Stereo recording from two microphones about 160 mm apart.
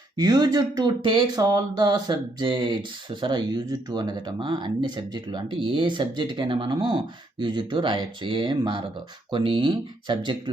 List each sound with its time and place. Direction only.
0.2 s speech: 25° right (ahead or behind)